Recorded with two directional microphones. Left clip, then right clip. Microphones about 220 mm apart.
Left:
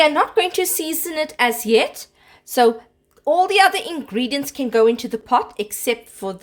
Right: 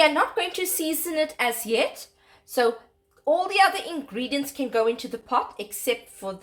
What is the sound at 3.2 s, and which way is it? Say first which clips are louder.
A woman's voice: left 6 dB; 50° left (ahead or behind).